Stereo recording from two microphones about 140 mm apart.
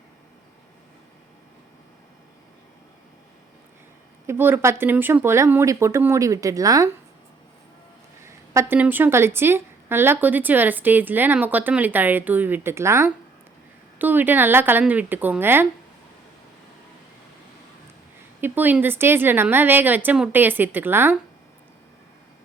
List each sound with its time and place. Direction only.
4.3 s speech: 15° right (ahead or behind)
8.2 s a woman's voice: 20° right (ahead or behind)
18.3 s a woman's voice: 15° right (ahead or behind)